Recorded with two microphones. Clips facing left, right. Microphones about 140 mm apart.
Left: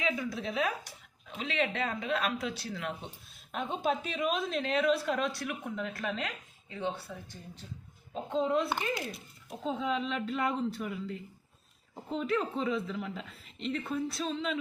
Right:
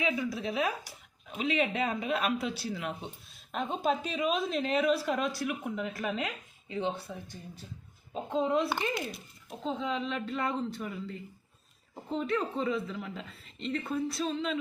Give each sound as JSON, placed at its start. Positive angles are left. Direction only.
{"t": 0.0, "sound": "a woman's voice", "side_deg": -5}
{"t": 6.7, "sound": "speech", "side_deg": -20}
{"t": 8.1, "sound": "a woman's voice", "side_deg": -5}